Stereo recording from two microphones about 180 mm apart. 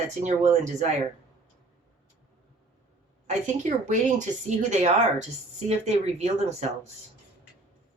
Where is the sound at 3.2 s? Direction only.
40° right (ahead or behind).